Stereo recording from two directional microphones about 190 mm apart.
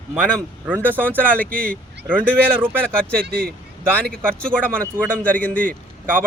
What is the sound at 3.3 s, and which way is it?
Speech, 50° right (ahead or behind).